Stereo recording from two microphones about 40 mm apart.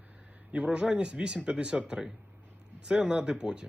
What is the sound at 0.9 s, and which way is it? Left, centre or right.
Speech, right.